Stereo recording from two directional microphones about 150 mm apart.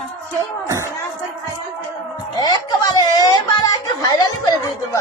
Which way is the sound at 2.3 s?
30° left (ahead or behind).